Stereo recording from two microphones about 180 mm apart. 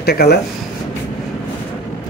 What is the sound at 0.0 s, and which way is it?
Speech, 60° left (ahead or behind).